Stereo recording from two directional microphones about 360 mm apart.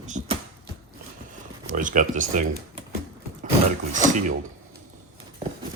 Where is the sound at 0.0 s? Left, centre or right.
Centre.